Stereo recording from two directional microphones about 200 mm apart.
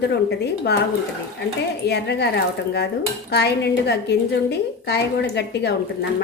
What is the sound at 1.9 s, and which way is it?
A woman's voice, 60° left (ahead or behind).